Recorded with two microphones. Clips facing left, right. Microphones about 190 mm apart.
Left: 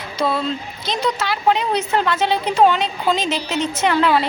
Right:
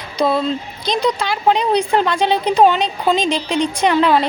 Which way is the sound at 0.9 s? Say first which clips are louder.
Right 3 dB; 15° right (ahead or behind).